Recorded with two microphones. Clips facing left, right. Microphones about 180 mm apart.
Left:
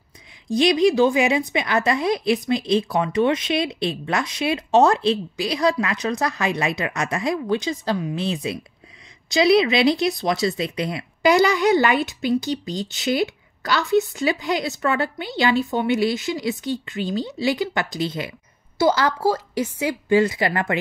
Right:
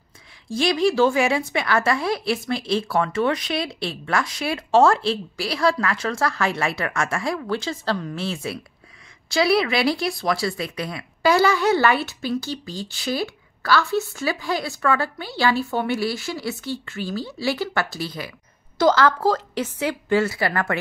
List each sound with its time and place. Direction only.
0.5 s speech: 20° left (ahead or behind)
18.8 s a woman's voice: 10° left (ahead or behind)